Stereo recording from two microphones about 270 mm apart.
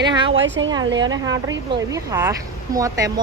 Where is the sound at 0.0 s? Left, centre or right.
Centre.